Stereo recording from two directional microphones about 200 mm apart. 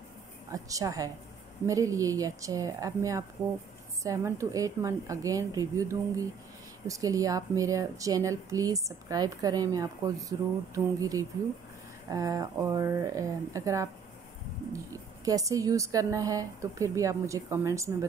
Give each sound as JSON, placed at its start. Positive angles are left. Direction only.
{"t": 0.5, "sound": "speech", "side_deg": -15}